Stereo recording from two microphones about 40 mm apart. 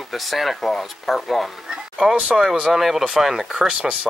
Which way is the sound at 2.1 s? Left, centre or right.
Centre.